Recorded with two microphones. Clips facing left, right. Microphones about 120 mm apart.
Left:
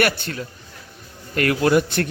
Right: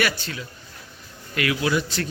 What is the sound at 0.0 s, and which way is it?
A man's voice, 55° left (ahead or behind).